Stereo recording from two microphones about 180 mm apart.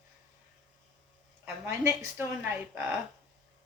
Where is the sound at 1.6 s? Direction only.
15° right (ahead or behind).